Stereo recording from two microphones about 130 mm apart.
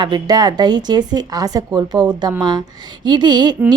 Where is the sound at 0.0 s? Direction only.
35° right (ahead or behind).